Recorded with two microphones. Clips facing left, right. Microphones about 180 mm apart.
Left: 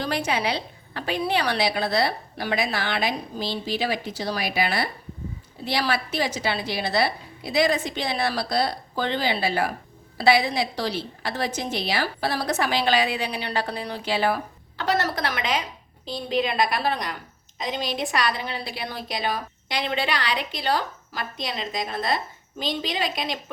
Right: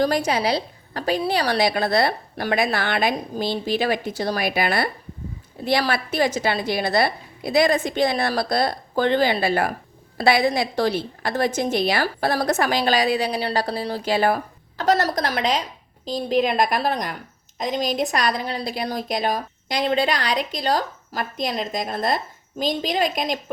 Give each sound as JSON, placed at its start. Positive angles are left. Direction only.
{"t": 0.0, "sound": "a woman's voice", "side_deg": -40}